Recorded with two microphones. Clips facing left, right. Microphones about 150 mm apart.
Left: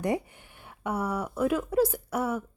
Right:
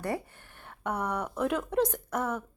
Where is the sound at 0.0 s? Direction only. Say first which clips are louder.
Left 4 dB; 15° left (ahead or behind).